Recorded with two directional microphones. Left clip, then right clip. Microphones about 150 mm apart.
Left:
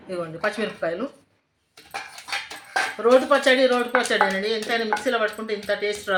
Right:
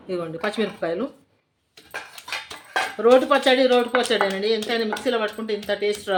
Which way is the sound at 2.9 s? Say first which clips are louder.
Right 1 dB; 50° right (ahead or behind).